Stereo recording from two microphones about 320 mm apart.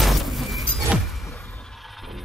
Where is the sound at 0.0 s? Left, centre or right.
Centre.